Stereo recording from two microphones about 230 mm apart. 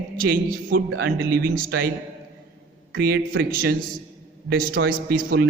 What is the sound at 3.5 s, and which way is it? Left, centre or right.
Speech, right.